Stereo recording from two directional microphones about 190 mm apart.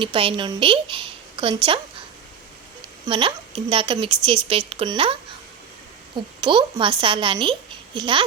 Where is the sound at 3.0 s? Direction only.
25° right (ahead or behind).